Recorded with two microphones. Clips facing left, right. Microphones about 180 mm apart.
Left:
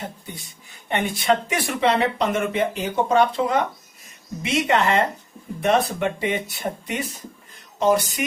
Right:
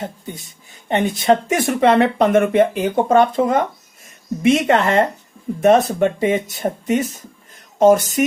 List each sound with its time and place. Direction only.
0.9 s speech: 40° right (ahead or behind)